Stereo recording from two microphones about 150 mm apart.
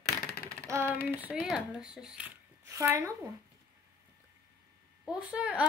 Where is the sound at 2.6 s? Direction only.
20° right (ahead or behind).